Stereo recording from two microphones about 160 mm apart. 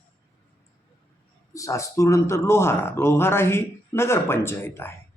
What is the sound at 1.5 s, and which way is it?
Speech, 20° left (ahead or behind).